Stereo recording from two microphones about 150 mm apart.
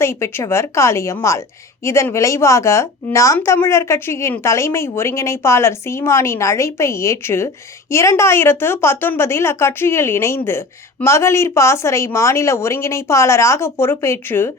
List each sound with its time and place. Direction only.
0.0 s a woman's voice: 15° left (ahead or behind)